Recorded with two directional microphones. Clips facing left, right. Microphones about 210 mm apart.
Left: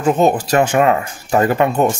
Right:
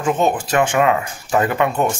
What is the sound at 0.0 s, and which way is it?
Speech, 40° left (ahead or behind).